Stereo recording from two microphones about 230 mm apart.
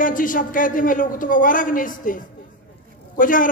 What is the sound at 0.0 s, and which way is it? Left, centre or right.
A man's voice, left.